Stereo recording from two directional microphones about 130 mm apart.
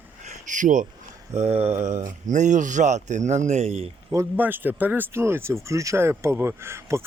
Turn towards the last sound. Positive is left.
turn(degrees=-20)  # may be behind; listen again after turning